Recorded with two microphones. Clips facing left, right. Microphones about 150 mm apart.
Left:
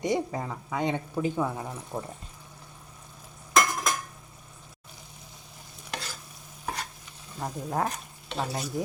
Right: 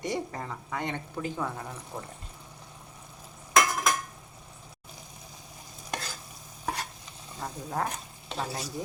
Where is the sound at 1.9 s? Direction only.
25° left (ahead or behind).